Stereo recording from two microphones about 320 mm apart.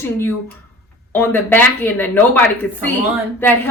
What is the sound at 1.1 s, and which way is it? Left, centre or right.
Speech, centre.